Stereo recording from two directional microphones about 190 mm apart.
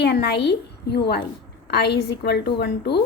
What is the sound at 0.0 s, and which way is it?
A woman's voice, 60° left (ahead or behind).